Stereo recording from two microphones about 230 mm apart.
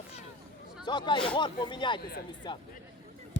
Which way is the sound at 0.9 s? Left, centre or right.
Centre.